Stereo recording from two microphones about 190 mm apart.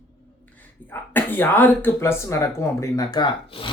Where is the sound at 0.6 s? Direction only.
10° left (ahead or behind); by 3.7 s 25° left (ahead or behind).